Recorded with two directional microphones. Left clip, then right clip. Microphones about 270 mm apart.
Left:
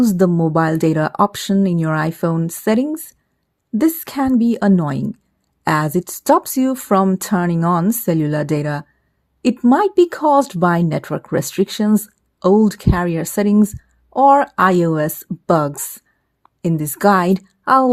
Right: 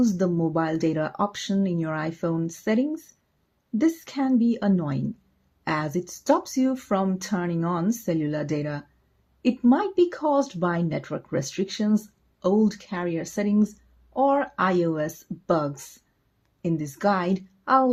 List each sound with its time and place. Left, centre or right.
0.0 s speech: left